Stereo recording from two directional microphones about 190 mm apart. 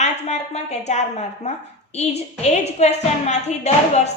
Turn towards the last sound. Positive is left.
turn(degrees=35)  # may be behind; listen again after turning